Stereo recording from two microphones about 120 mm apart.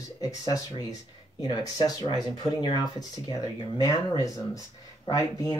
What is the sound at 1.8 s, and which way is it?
Speech, 35° left (ahead or behind).